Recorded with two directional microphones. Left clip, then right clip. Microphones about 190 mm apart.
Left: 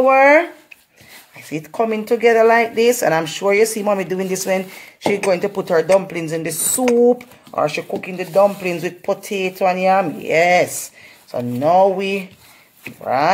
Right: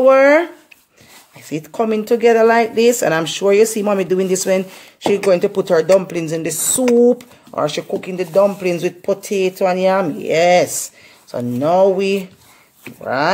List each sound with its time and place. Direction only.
0.0 s speech: 40° right (ahead or behind)
1.5 s speech: 45° right (ahead or behind)
6.7 s speech: 5° right (ahead or behind)
7.1 s speech: 45° right (ahead or behind)